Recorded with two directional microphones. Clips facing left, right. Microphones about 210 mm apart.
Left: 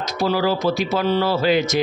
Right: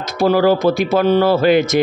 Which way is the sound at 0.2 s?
55° right (ahead or behind).